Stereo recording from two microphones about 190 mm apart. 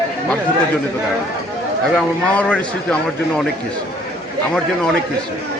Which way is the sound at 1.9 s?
5° left (ahead or behind).